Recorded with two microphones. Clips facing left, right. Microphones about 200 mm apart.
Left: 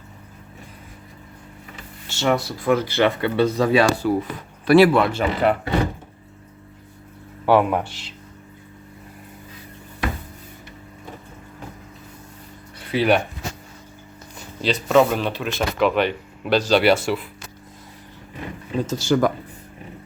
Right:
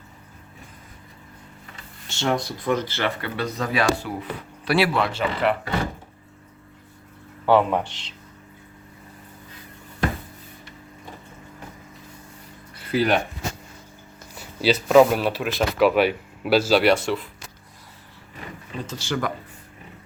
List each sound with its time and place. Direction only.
2.1 s speech: 5° left (ahead or behind); by 4.1 s 30° left (ahead or behind)
4.2 s speech: 50° left (ahead or behind)
7.4 s speech: 10° left (ahead or behind)
12.8 s speech: centre (ahead or behind)
14.3 s speech: 5° right (ahead or behind)
18.9 s speech: 40° left (ahead or behind)